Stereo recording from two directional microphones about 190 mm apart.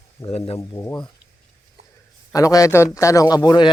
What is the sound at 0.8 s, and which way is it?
Speech, 20° left (ahead or behind).